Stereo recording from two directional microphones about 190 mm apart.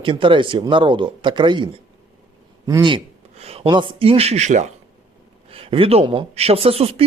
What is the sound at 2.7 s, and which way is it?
Speech, 25° right (ahead or behind).